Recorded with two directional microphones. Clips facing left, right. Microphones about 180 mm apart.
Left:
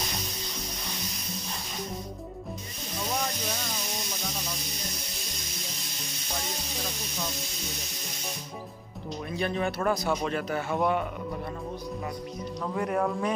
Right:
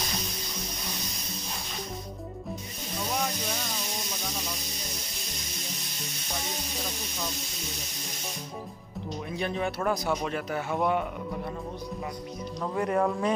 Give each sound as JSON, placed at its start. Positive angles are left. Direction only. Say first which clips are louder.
{"t": 9.4, "sound": "a man's voice", "louder": "left 1 dB", "side_deg": -15}
{"t": 12.7, "sound": "speech", "louder": "right 2 dB", "side_deg": 0}